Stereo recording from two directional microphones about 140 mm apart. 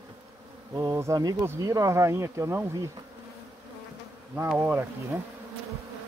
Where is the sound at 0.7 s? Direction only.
25° right (ahead or behind).